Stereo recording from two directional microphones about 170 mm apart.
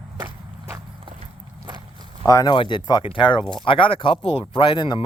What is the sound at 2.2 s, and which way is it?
Speech, 20° left (ahead or behind).